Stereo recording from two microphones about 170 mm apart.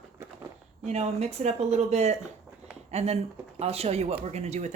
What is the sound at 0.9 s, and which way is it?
A woman's voice, 40° right (ahead or behind).